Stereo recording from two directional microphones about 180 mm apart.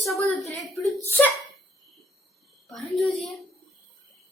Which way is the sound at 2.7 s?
Centre (ahead or behind).